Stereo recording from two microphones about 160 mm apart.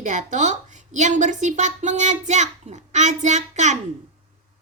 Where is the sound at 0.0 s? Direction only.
50° right (ahead or behind).